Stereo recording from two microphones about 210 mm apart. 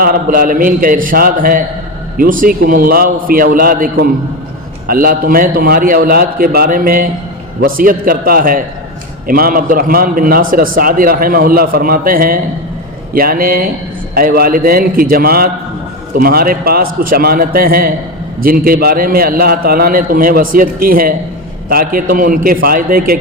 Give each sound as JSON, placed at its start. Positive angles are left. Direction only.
{"t": 0.0, "sound": "a man's voice", "side_deg": -45}